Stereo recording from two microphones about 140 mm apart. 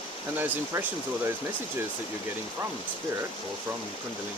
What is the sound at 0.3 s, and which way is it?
Speech, 15° right (ahead or behind).